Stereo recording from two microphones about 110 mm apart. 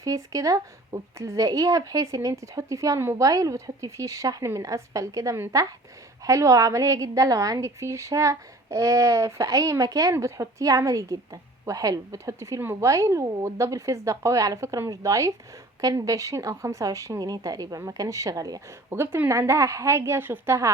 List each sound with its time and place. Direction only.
0.0 s a woman's voice: 30° right (ahead or behind)
18.9 s a woman's voice: 20° right (ahead or behind)